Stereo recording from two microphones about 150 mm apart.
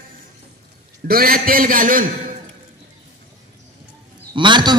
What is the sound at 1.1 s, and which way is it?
A man's voice, 75° right (ahead or behind).